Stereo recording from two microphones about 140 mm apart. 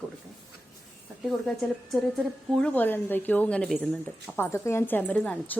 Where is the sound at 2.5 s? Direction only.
5° left (ahead or behind).